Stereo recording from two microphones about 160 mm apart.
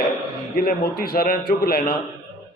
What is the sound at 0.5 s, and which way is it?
A man's voice, 70° left (ahead or behind).